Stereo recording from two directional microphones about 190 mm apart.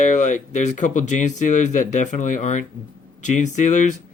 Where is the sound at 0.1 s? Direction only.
40° left (ahead or behind).